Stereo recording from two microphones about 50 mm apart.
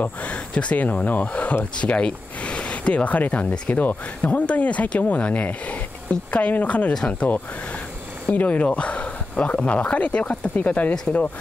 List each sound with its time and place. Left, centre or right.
0.0 s speech: left